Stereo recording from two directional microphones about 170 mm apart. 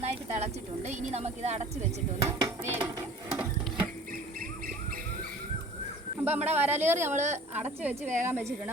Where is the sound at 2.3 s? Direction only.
20° right (ahead or behind).